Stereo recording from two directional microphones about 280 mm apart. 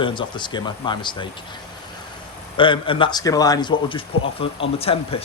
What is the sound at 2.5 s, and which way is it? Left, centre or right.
Speech, centre.